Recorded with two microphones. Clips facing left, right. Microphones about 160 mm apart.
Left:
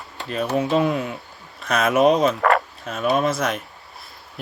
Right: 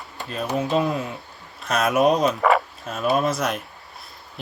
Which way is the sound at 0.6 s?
Centre (ahead or behind).